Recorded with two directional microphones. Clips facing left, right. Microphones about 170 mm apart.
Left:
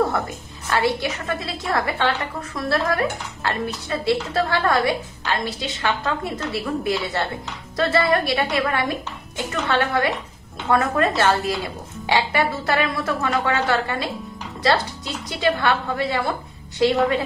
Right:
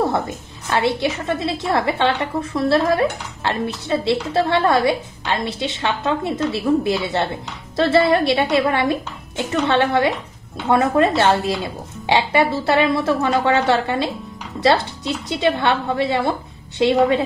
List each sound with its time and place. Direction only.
0.7 s speech: 25° right (ahead or behind)